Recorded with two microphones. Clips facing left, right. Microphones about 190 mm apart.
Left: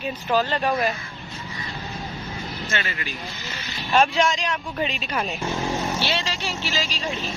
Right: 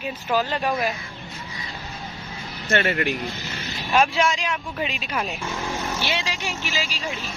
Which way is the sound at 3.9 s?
Centre (ahead or behind).